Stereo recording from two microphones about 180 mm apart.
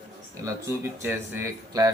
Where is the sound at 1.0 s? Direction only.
15° right (ahead or behind).